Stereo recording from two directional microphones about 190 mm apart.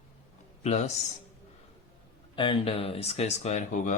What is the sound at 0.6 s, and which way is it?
Speech, 35° left (ahead or behind).